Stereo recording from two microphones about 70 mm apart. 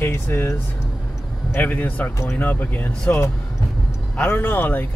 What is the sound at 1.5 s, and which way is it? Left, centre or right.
Speech, left.